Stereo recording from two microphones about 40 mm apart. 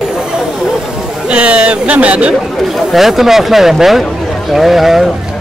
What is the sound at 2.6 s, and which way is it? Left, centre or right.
Speech, centre.